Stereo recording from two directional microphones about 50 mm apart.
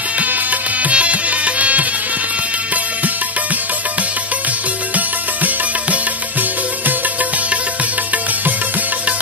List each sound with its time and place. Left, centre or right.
0.2 s music: right
4.9 s music: right